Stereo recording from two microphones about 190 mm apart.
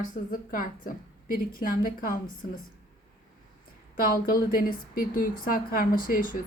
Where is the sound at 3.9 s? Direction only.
50° left (ahead or behind).